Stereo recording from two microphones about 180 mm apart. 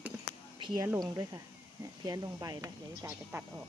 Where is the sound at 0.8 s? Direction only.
15° right (ahead or behind).